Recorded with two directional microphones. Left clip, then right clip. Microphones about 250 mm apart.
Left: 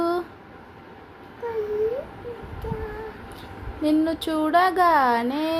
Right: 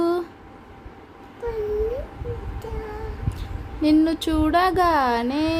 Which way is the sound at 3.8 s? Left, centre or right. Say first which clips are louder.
Right 3 dB; right.